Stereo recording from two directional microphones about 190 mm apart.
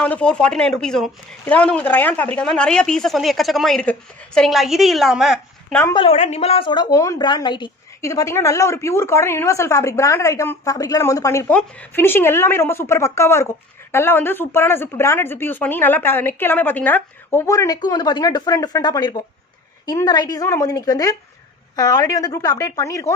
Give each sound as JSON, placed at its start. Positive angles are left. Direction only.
{"t": 0.0, "sound": "speech", "side_deg": 5}
{"t": 5.9, "sound": "a woman's voice", "side_deg": 35}